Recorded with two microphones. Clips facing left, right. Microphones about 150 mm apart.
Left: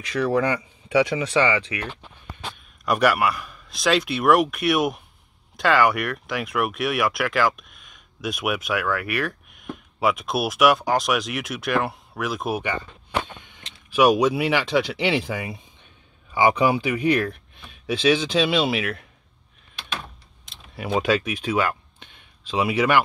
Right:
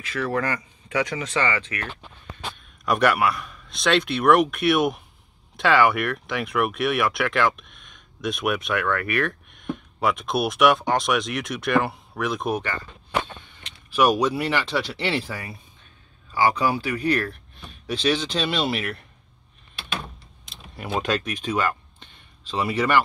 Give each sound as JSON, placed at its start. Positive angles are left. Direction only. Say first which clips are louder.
{"t": 0.2, "sound": "speech", "louder": "left 4 dB", "side_deg": 15}
{"t": 2.8, "sound": "speech", "louder": "even", "side_deg": 0}
{"t": 20.4, "sound": "speech", "louder": "left 4 dB", "side_deg": 0}